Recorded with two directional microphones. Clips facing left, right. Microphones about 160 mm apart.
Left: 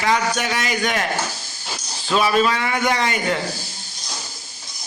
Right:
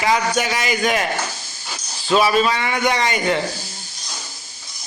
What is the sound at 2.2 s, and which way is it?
A man's voice, 5° right (ahead or behind).